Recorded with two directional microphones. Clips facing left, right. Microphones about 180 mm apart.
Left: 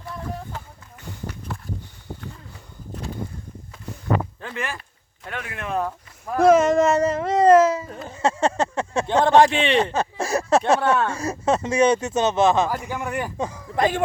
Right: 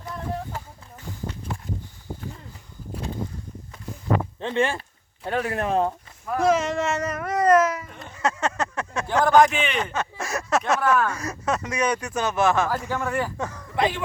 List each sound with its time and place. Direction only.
4.4 s speech: 25° right (ahead or behind)
6.4 s speech: 50° left (ahead or behind); by 13.7 s 15° left (ahead or behind)
13.7 s speech: 45° left (ahead or behind)